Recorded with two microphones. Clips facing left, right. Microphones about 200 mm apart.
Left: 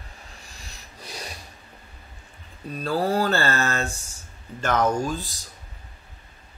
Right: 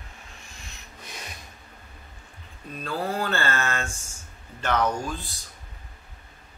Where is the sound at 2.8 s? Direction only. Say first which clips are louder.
Left 6 dB; 35° left (ahead or behind).